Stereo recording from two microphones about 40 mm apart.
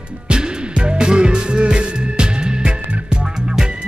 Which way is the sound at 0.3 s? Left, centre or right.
Right.